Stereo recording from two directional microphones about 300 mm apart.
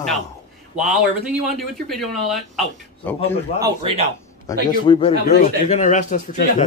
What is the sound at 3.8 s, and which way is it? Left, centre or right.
Speech, centre.